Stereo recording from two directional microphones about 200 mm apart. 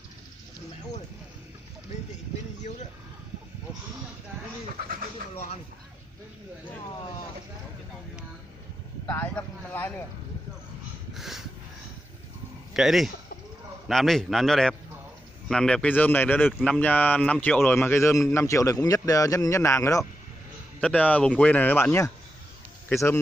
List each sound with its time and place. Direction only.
9.0 s a man's voice: 10° left (ahead or behind)
11.1 s a sound: centre (ahead or behind)
12.7 s a man's voice: centre (ahead or behind)